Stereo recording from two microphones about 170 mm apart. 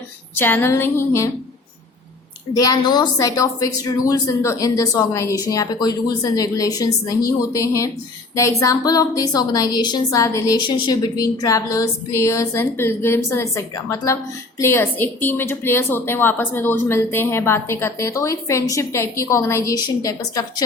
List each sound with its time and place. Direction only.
0.3 s a woman's voice: 10° left (ahead or behind)
2.5 s a woman's voice: 20° left (ahead or behind)